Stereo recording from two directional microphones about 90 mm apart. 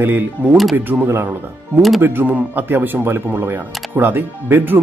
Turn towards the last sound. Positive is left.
turn(degrees=-20)  # may be behind; listen again after turning